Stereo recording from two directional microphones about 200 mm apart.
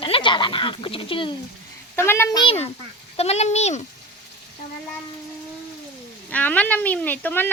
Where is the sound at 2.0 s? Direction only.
15° left (ahead or behind); by 3.8 s 35° left (ahead or behind).